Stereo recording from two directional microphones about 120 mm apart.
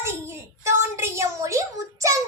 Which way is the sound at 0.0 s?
20° right (ahead or behind).